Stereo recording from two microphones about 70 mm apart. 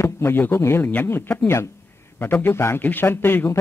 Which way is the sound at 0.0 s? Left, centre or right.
Left.